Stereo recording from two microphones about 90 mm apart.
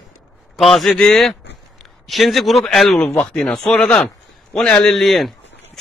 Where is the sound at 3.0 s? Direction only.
15° left (ahead or behind).